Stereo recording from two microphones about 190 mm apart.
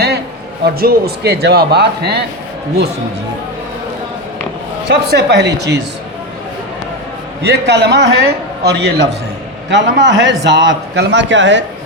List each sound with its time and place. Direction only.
0.6 s a man's voice: 55° right (ahead or behind)
4.9 s a man's voice: 60° right (ahead or behind)
7.4 s a man's voice: 60° right (ahead or behind)